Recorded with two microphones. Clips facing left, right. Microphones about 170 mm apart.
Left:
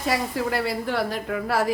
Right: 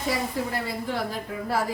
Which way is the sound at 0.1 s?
75° left (ahead or behind).